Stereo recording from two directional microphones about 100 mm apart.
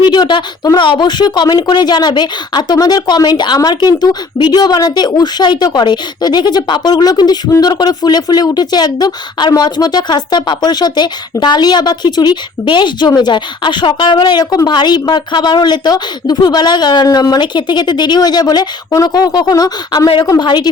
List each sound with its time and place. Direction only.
0.0 s a woman's voice: 45° left (ahead or behind)